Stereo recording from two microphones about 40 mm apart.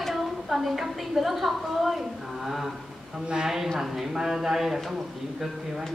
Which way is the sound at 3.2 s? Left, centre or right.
Right.